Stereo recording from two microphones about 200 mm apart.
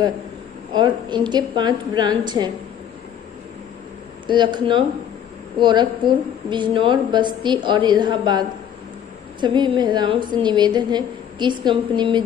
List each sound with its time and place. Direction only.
0.7 s a woman's voice: 20° right (ahead or behind)
4.3 s a woman's voice: 25° right (ahead or behind)